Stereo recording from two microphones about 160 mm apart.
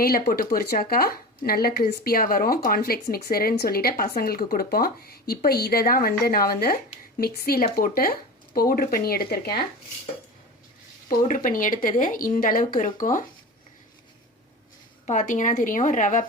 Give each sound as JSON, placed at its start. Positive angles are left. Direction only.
{"t": 0.0, "sound": "a woman's voice", "side_deg": 70}
{"t": 11.1, "sound": "speech", "side_deg": 55}
{"t": 15.0, "sound": "a woman's voice", "side_deg": 50}